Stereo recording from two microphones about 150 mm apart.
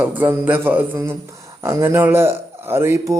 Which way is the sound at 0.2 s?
10° right (ahead or behind).